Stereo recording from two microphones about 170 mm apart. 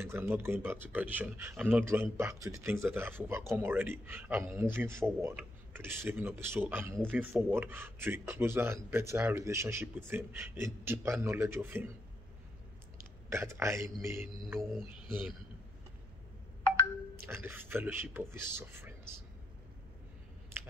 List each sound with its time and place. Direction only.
0.0 s speech: 15° right (ahead or behind)
13.3 s a man's voice: 15° right (ahead or behind)
17.2 s speech: 15° right (ahead or behind)